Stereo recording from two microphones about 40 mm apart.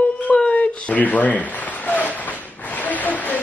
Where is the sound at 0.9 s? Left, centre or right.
Left.